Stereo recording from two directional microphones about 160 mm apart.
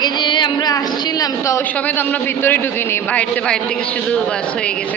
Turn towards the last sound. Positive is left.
turn(degrees=10)  # may be behind; listen again after turning